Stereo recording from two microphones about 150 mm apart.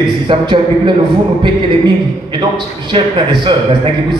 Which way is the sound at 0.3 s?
30° right (ahead or behind).